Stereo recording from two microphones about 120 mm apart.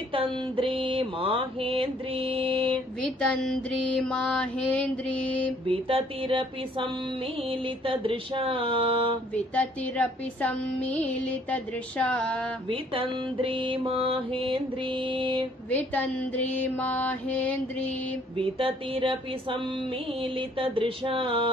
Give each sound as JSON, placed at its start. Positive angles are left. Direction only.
{"t": 0.1, "sound": "mantra", "side_deg": -45}
{"t": 3.0, "sound": "music", "side_deg": 5}
{"t": 5.7, "sound": "mantra", "side_deg": -50}
{"t": 9.3, "sound": "music", "side_deg": 10}
{"t": 12.6, "sound": "mantra", "side_deg": -50}
{"t": 15.7, "sound": "music", "side_deg": 15}
{"t": 18.4, "sound": "mantra", "side_deg": -50}